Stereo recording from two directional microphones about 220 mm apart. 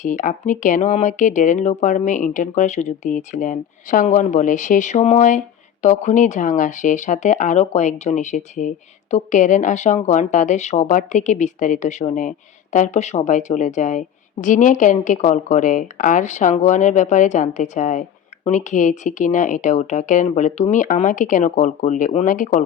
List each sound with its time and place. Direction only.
0.0 s speech: 35° left (ahead or behind)